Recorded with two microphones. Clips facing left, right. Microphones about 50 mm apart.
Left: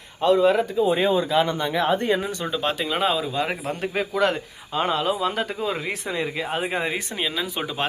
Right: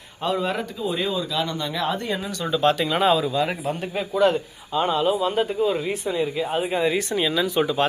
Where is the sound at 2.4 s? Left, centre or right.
Centre.